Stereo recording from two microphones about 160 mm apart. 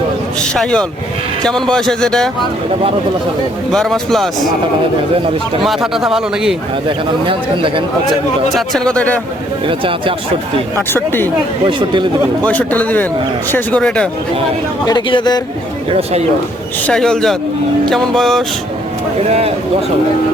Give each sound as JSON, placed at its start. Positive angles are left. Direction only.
{"t": 0.5, "sound": "speech", "side_deg": 5}
{"t": 3.7, "sound": "speech", "side_deg": 5}
{"t": 5.6, "sound": "speech", "side_deg": 0}
{"t": 6.8, "sound": "speech", "side_deg": -30}
{"t": 8.1, "sound": "speech", "side_deg": 0}
{"t": 9.6, "sound": "speech", "side_deg": -35}
{"t": 10.9, "sound": "speech", "side_deg": 15}
{"t": 11.6, "sound": "speech", "side_deg": -30}
{"t": 12.5, "sound": "speech", "side_deg": 10}
{"t": 14.8, "sound": "speech", "side_deg": 25}
{"t": 15.9, "sound": "speech", "side_deg": -40}
{"t": 16.8, "sound": "speech", "side_deg": 5}
{"t": 19.3, "sound": "speech", "side_deg": -40}